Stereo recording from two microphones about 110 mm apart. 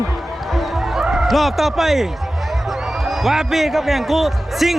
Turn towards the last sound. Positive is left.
turn(degrees=0)  # may be behind; listen again after turning